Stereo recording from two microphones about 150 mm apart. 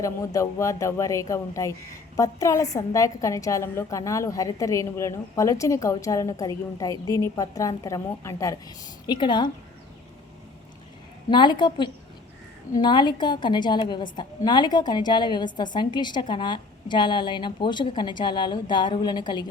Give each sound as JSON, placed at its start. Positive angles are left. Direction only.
{"t": 0.3, "sound": "a woman's voice", "side_deg": 20}
{"t": 9.0, "sound": "a woman's voice", "side_deg": 30}
{"t": 11.3, "sound": "a woman's voice", "side_deg": 30}